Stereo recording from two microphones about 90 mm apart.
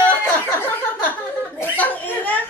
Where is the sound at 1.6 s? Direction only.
20° left (ahead or behind).